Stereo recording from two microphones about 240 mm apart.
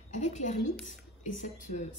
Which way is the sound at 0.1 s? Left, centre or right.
Left.